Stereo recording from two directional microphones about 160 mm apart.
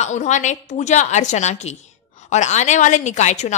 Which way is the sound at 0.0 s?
50° left (ahead or behind).